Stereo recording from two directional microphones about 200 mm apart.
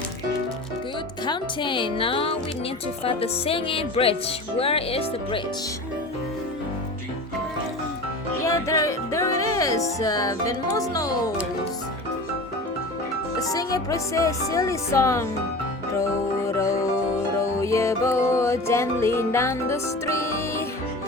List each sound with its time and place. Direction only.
1.2 s speech: 25° left (ahead or behind)
8.4 s music: 15° left (ahead or behind)
13.5 s speech: 20° left (ahead or behind)
16.5 s music: 15° left (ahead or behind)